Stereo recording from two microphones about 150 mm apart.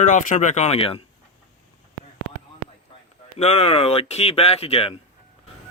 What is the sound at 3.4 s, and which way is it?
Speech, 45° left (ahead or behind).